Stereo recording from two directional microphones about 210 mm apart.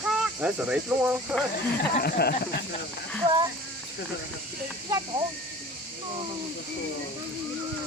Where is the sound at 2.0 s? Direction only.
45° left (ahead or behind).